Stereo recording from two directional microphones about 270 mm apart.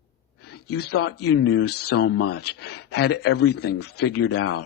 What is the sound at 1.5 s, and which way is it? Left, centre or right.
A man's voice, left.